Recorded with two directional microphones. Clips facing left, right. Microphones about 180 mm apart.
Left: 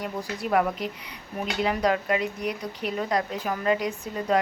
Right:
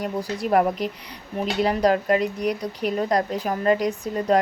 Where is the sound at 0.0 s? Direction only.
40° right (ahead or behind).